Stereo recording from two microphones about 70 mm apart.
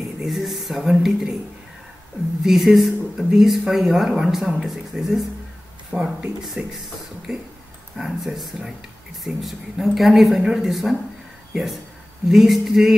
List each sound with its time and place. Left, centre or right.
0.2 s speech: centre
2.4 s speech: centre
6.6 s speech: centre